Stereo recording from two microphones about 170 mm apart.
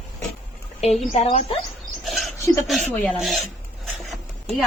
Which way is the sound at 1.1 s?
40° left (ahead or behind).